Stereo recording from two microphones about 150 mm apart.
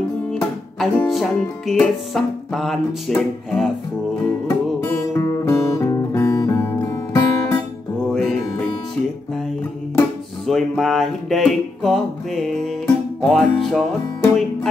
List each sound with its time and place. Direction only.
0.3 s music: centre (ahead or behind)
4.5 s music: 20° left (ahead or behind)
8.1 s music: centre (ahead or behind)
10.4 s music: centre (ahead or behind)